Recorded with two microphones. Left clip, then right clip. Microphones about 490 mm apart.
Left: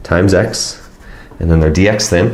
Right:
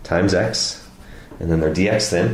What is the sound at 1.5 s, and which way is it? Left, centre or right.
Speech, left.